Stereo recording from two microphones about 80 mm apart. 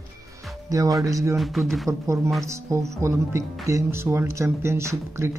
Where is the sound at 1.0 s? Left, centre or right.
Right.